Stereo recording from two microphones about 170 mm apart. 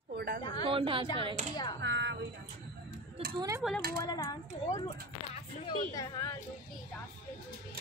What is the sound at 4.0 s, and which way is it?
Speech, 25° left (ahead or behind).